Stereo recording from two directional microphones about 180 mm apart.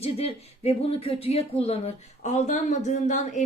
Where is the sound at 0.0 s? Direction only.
35° left (ahead or behind).